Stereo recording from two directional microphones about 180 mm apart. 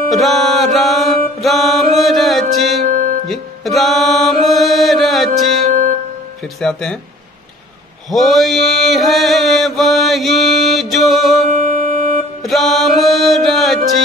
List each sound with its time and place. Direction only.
0.1 s mantra: centre (ahead or behind)
2.9 s music: 45° right (ahead or behind)
3.3 s music: centre (ahead or behind)
5.7 s music: 45° right (ahead or behind)
6.4 s speech: 5° left (ahead or behind)
8.1 s chant: centre (ahead or behind)
11.5 s music: 50° right (ahead or behind)
12.4 s music: centre (ahead or behind)